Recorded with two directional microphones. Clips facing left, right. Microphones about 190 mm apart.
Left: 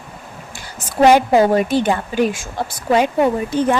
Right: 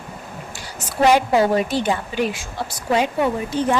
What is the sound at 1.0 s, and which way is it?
A woman's voice, 50° left (ahead or behind).